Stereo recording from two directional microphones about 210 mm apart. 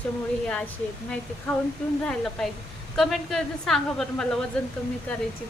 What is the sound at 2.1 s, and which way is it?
A woman's voice, 5° left (ahead or behind).